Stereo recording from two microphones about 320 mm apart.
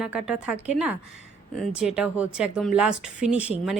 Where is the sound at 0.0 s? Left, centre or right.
Centre.